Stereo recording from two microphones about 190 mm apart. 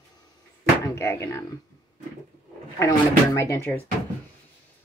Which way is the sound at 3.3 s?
15° left (ahead or behind).